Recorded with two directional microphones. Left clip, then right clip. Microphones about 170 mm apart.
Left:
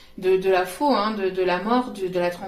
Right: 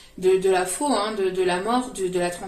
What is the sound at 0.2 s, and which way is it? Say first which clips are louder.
Speech: even; 30° left (ahead or behind).